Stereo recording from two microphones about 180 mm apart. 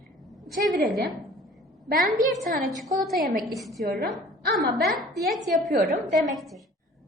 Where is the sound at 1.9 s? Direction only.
50° right (ahead or behind).